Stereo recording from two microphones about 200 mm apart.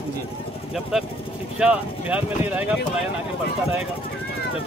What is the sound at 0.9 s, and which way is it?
Speech, 5° right (ahead or behind).